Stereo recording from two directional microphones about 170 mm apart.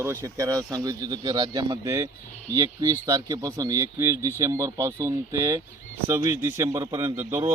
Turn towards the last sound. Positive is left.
turn(degrees=-15)  # may be behind; listen again after turning